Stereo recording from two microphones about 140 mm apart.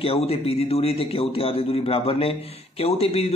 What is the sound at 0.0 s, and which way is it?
A man's voice, 45° left (ahead or behind).